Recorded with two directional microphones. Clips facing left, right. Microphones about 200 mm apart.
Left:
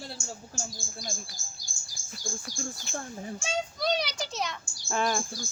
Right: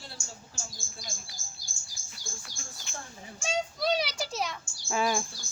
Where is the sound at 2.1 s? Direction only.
40° left (ahead or behind).